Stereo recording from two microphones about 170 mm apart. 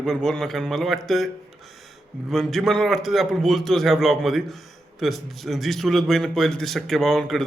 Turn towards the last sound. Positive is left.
turn(degrees=0)  # may be behind; listen again after turning